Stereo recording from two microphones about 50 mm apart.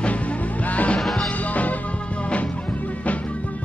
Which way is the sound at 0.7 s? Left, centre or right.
Left.